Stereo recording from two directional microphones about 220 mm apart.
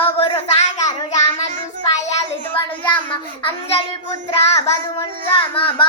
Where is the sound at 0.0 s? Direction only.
25° left (ahead or behind).